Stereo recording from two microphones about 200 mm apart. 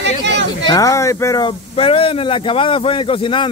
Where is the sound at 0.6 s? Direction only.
20° left (ahead or behind).